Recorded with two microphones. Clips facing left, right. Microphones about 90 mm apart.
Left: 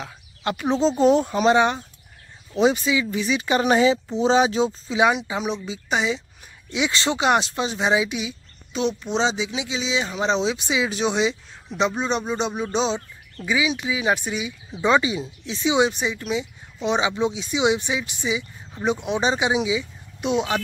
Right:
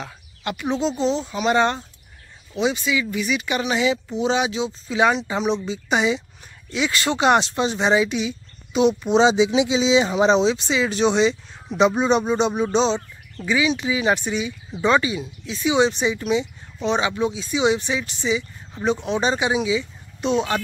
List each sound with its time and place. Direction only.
0.4 s speech: 35° left (ahead or behind)
1.0 s speech: 50° left (ahead or behind)
1.5 s speech: 15° left (ahead or behind)
2.5 s speech: 40° left (ahead or behind)
4.8 s a woman's voice: 10° left (ahead or behind)
6.7 s speech: 20° left (ahead or behind)
7.2 s a woman's voice: 5° left (ahead or behind)
8.7 s speech: 10° right (ahead or behind)
9.4 s speech: 20° right (ahead or behind)
10.4 s speech: 10° left (ahead or behind)
11.7 s a woman's voice: 5° right (ahead or behind); by 15.9 s 20° left (ahead or behind)
15.9 s a woman's voice: centre (ahead or behind)
16.8 s speech: 15° left (ahead or behind)